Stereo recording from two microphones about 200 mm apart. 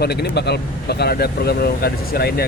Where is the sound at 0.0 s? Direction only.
55° left (ahead or behind).